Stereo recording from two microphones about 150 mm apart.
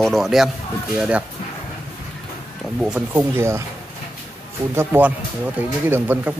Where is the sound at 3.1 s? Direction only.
15° right (ahead or behind).